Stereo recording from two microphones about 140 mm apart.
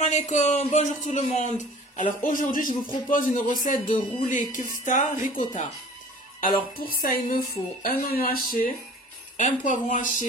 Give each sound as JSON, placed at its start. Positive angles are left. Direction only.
{"t": 0.0, "sound": "a man's voice", "side_deg": 55}
{"t": 6.4, "sound": "speech", "side_deg": 90}
{"t": 9.4, "sound": "speech", "side_deg": 65}